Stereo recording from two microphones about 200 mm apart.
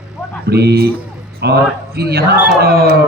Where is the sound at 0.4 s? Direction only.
55° right (ahead or behind).